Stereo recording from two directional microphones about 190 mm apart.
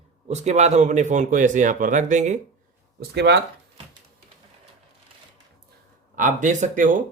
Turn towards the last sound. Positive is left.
turn(degrees=-45)  # may be behind; listen again after turning